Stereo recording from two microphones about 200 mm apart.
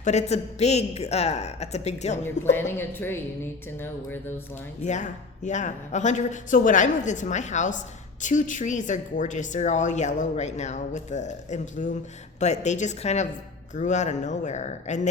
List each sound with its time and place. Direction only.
0.0 s speech: 35° left (ahead or behind)
2.4 s a woman's voice: 10° left (ahead or behind)
4.8 s speech: 35° left (ahead or behind)